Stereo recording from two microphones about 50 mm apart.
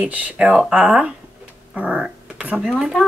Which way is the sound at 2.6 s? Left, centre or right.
Centre.